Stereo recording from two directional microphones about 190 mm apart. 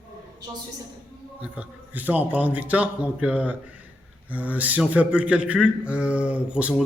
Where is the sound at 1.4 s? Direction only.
5° right (ahead or behind).